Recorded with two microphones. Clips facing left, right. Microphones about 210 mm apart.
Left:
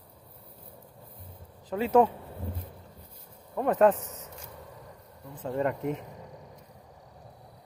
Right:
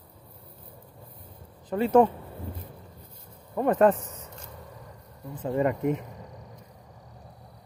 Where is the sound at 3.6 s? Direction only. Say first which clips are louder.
Right 1 dB; centre (ahead or behind).